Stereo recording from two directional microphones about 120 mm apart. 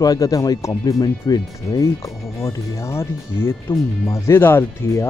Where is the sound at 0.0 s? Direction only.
30° left (ahead or behind).